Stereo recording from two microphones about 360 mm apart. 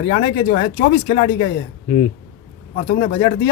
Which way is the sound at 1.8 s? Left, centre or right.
Centre.